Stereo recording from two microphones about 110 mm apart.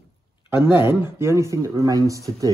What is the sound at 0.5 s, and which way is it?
Speech, 20° right (ahead or behind).